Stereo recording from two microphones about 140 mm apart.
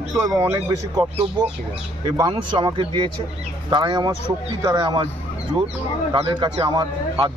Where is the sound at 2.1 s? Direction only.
35° right (ahead or behind).